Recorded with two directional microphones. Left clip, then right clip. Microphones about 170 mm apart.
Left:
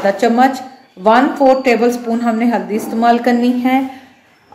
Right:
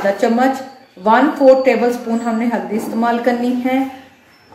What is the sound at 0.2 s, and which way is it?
A woman's voice, 50° left (ahead or behind).